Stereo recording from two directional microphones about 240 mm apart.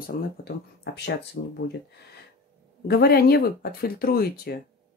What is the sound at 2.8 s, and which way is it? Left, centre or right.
Speech, left.